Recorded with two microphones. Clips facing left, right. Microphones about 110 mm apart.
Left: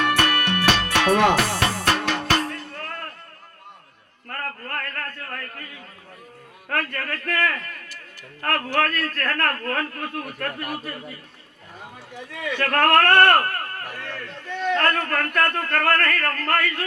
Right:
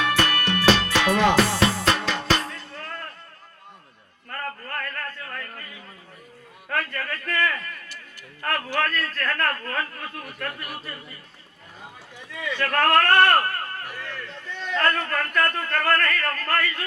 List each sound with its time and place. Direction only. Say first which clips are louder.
0.0 s music: left 2 dB; 60° left (ahead or behind)
4.3 s a sound: left 1 dB; 55° left (ahead or behind)
6.7 s speech: left 1 dB; 55° left (ahead or behind)
12.3 s speech: left 2 dB; 60° left (ahead or behind)